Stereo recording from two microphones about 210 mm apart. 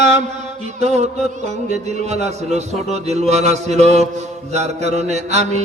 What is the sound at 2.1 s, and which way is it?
A man's voice, 30° right (ahead or behind).